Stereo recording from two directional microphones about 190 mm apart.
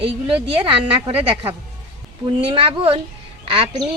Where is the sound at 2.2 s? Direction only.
25° right (ahead or behind).